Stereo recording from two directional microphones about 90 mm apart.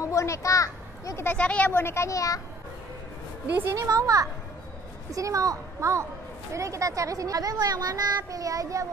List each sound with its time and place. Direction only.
0.0 s a sound: 35° left (ahead or behind)
1.2 s speech: 15° left (ahead or behind)
1.7 s speech: 25° left (ahead or behind)
3.7 s speech: 40° right (ahead or behind)